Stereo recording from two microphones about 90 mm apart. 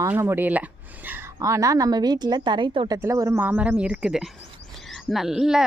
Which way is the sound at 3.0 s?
35° right (ahead or behind).